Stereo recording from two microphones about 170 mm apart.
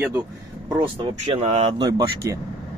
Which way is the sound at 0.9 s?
30° right (ahead or behind).